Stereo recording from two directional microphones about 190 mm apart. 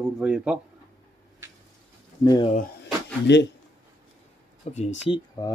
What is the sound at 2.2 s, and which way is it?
Speech, 20° left (ahead or behind).